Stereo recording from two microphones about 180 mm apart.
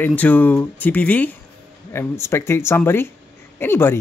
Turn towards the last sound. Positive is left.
turn(degrees=10)  # may be behind; listen again after turning